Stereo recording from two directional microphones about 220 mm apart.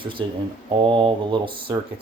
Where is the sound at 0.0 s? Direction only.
20° right (ahead or behind).